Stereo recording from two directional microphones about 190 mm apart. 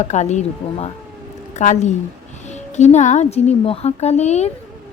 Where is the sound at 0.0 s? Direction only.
40° left (ahead or behind).